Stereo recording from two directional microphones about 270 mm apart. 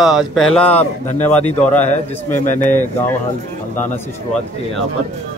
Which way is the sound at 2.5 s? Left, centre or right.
Left.